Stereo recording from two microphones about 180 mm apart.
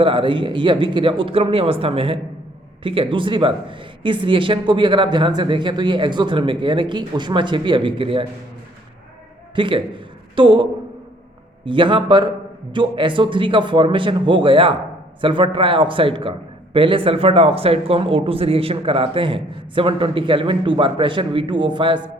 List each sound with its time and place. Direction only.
0.0 s speech: 30° right (ahead or behind)
9.6 s a man's voice: 30° right (ahead or behind)